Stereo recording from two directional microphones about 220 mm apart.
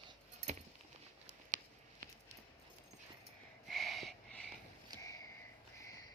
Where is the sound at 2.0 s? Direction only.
35° right (ahead or behind).